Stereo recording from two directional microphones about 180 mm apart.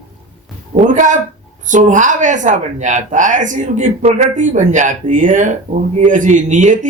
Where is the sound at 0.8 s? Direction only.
45° right (ahead or behind).